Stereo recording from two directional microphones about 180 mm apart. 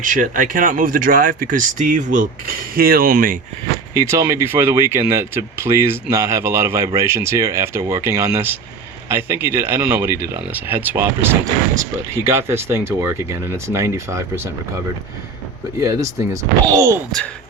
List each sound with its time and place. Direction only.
0.0 s speech: 50° right (ahead or behind)
3.9 s speech: 20° right (ahead or behind)
15.8 s speech: 15° right (ahead or behind)
17.1 s speech: centre (ahead or behind)